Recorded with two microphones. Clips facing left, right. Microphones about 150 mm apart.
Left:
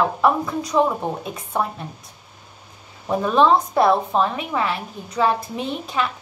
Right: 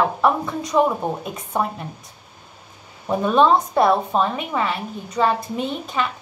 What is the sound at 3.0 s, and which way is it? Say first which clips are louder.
A woman's voice: even; centre (ahead or behind).